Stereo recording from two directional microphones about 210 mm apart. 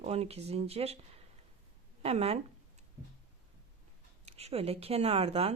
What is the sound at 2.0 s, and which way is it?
Speech, 30° right (ahead or behind).